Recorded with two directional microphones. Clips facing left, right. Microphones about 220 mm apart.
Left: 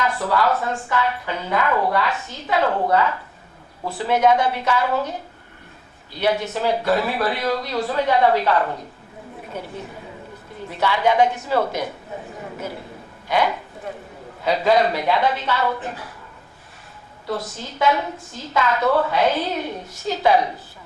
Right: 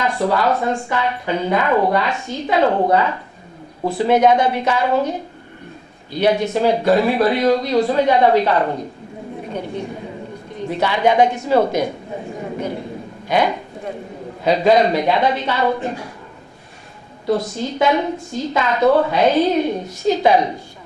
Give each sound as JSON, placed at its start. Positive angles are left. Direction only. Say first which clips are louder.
{"t": 0.0, "sound": "speech", "louder": "right 3 dB", "side_deg": -15}
{"t": 6.1, "sound": "speech", "louder": "right 5 dB", "side_deg": -20}
{"t": 9.5, "sound": "a woman's voice", "louder": "right 6 dB", "side_deg": 5}
{"t": 10.7, "sound": "speech", "louder": "right 3 dB", "side_deg": -20}
{"t": 13.2, "sound": "a sound", "louder": "right 3 dB", "side_deg": -20}
{"t": 14.4, "sound": "speech", "louder": "right 4 dB", "side_deg": -20}
{"t": 17.2, "sound": "speech", "louder": "right 8 dB", "side_deg": -15}